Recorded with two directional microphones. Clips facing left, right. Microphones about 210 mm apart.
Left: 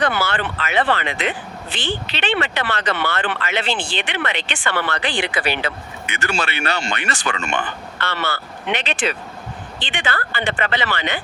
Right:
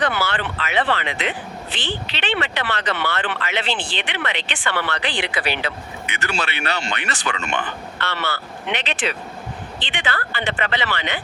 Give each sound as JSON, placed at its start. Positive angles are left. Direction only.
{"t": 0.0, "sound": "speech", "side_deg": 45}